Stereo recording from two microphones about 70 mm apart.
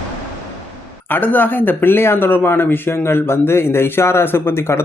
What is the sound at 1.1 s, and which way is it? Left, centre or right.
Speech, left.